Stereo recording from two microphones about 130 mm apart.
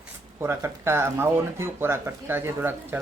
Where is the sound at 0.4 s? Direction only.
20° right (ahead or behind).